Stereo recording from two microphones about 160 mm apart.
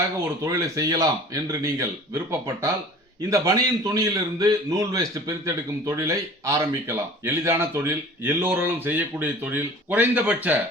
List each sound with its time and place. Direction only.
0.4 s a man's voice: 20° right (ahead or behind)